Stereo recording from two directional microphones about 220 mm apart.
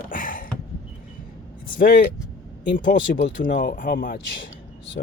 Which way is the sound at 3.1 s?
40° left (ahead or behind).